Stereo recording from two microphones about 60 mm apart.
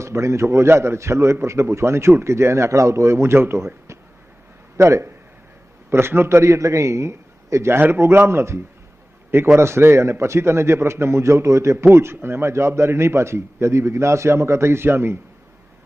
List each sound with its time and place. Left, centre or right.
0.0 s a man's voice: right
4.8 s a man's voice: right